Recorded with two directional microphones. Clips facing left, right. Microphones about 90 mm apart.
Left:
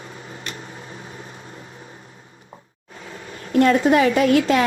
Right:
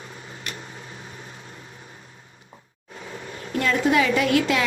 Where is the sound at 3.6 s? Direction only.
40° left (ahead or behind).